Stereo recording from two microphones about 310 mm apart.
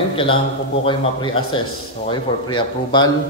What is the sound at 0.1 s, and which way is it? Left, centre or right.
A man's voice, centre.